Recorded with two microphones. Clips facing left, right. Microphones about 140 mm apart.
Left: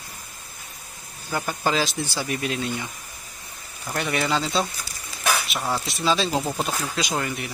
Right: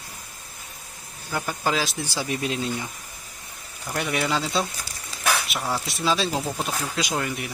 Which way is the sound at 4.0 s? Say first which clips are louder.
Left 1 dB; 5° right (ahead or behind).